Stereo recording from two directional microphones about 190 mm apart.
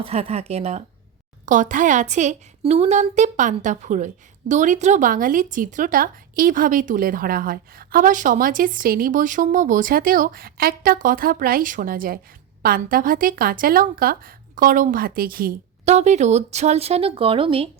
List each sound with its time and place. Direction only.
0.0 s a woman's voice: 30° right (ahead or behind)